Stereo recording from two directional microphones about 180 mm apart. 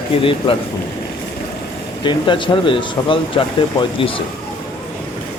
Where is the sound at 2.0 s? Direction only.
25° left (ahead or behind).